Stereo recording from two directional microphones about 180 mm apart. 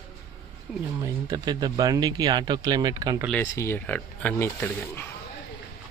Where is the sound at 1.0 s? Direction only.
20° right (ahead or behind).